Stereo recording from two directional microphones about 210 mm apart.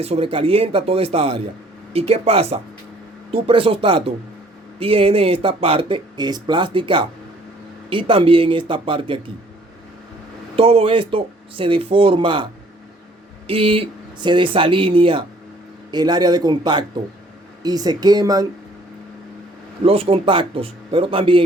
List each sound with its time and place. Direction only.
0.0 s speech: 25° right (ahead or behind)
10.5 s speech: 25° right (ahead or behind)
13.5 s speech: 25° right (ahead or behind)
19.8 s speech: 25° right (ahead or behind)